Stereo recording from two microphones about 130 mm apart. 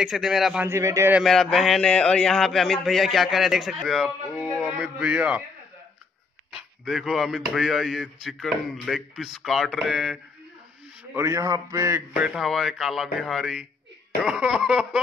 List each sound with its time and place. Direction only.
0.0 s speech: 5° right (ahead or behind)
0.7 s a man's voice: 25° right (ahead or behind)
1.2 s speech: centre (ahead or behind)
4.5 s speech: 10° right (ahead or behind)
6.8 s speech: 5° right (ahead or behind)
11.1 s a man's voice: 25° right (ahead or behind)
12.2 s speech: 5° right (ahead or behind)
14.2 s cough: 5° right (ahead or behind)